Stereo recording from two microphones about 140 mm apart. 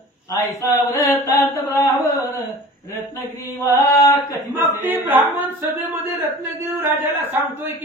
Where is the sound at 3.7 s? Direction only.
20° left (ahead or behind).